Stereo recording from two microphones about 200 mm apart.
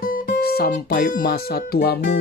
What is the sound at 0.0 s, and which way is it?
Speech, 45° left (ahead or behind).